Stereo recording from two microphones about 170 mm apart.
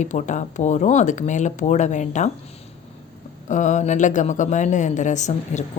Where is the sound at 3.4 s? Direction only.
45° left (ahead or behind).